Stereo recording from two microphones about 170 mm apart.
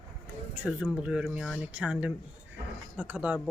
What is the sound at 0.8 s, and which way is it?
Speech, 5° right (ahead or behind).